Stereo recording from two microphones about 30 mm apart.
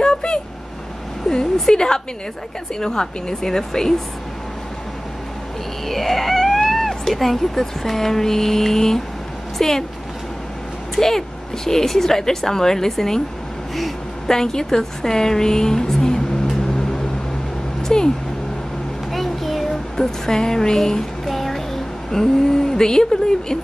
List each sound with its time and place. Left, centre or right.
0.0 s vehicle: left
1.3 s a woman's voice: left
5.9 s a woman's voice: centre
11.0 s a woman's voice: centre
14.2 s a woman's voice: centre
15.9 s a sound: centre
17.8 s speech: left
19.1 s child singing: centre
19.7 s speech: centre
21.3 s music: centre
22.1 s a woman's voice: centre